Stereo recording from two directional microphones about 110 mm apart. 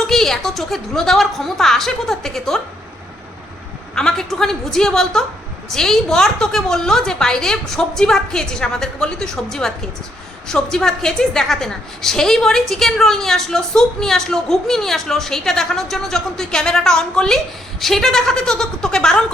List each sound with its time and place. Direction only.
0.1 s a woman's voice: 5° left (ahead or behind)
3.9 s a woman's voice: 5° left (ahead or behind)